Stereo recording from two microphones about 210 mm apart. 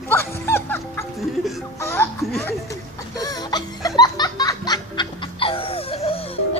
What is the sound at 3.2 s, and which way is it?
Music, 20° left (ahead or behind).